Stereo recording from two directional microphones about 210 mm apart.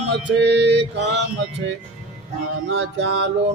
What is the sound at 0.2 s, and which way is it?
Mantra, 55° right (ahead or behind).